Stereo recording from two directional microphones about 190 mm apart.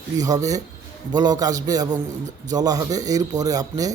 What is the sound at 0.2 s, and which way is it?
Speech, 20° right (ahead or behind).